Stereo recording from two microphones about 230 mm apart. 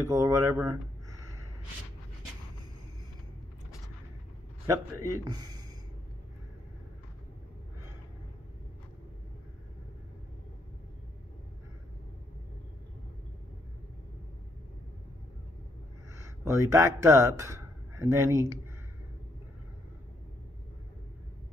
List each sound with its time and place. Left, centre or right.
0.0 s a man's voice: centre
4.6 s a man's voice: centre
16.2 s speech: centre